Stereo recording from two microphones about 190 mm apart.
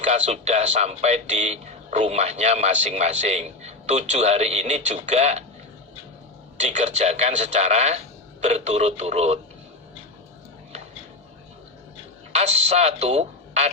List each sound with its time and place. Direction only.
0.0 s speech: 35° right (ahead or behind)
6.6 s speech: 40° right (ahead or behind)
12.3 s speech: 35° right (ahead or behind)